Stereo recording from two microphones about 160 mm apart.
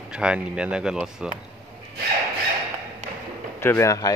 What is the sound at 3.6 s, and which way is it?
Speech, 15° left (ahead or behind).